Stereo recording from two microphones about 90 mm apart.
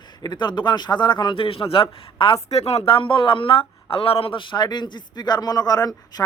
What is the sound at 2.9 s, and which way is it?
A man's voice, 75° left (ahead or behind).